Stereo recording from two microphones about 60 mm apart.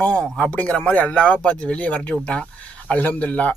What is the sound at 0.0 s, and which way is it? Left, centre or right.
Speech, centre.